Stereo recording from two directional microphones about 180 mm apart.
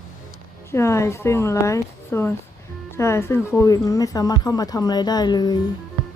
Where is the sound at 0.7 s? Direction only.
15° left (ahead or behind).